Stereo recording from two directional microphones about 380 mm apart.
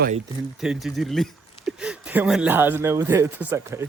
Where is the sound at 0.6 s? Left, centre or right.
Centre.